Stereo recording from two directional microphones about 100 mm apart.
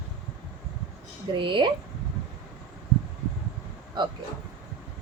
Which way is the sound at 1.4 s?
55° right (ahead or behind).